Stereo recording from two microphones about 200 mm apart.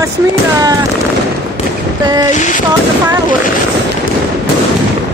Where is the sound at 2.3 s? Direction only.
40° left (ahead or behind).